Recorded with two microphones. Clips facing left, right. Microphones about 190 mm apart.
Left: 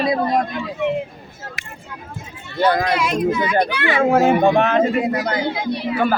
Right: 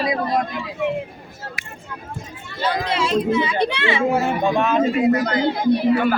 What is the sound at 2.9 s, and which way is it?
A child's voice, 30° right (ahead or behind).